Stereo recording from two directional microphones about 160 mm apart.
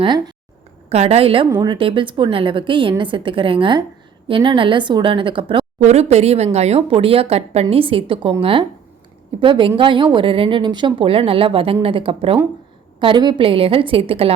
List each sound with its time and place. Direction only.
0.0 s a woman's voice: 25° right (ahead or behind)
0.9 s a woman's voice: 40° right (ahead or behind)